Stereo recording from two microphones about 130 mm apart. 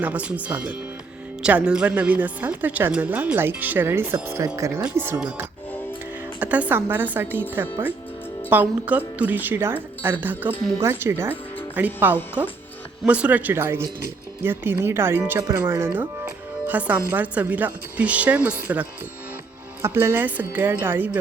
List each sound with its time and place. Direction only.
0.0 s speech: 10° right (ahead or behind)